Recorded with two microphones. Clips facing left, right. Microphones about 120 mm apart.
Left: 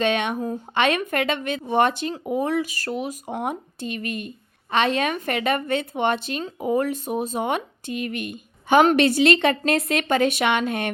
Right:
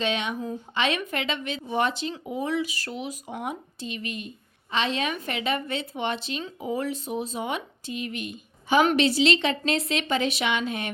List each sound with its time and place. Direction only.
0.0 s speech: 55° left (ahead or behind)